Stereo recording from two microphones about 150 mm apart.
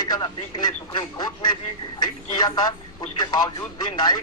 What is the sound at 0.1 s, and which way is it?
Speech, 30° left (ahead or behind).